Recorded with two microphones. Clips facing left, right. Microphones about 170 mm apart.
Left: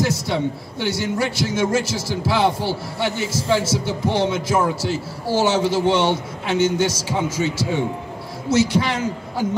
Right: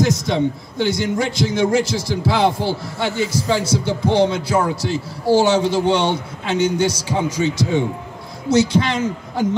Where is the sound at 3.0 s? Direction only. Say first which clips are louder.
Right 3 dB; 15° left (ahead or behind).